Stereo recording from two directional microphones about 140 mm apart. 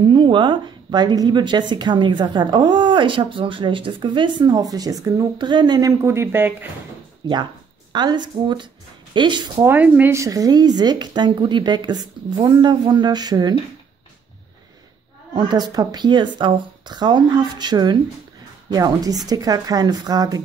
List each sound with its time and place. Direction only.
0.0 s a woman's voice: 35° right (ahead or behind); by 6.5 s 15° right (ahead or behind)
7.2 s a woman's voice: 30° right (ahead or behind)
9.7 s speech: 15° right (ahead or behind); by 13.6 s 30° right (ahead or behind)
15.3 s a woman's voice: 30° right (ahead or behind)